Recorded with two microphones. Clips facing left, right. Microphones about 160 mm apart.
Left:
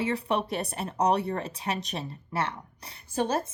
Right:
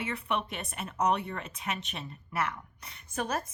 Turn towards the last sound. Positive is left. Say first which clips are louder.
# left 6 dB
turn(degrees=30)  # may be behind; listen again after turning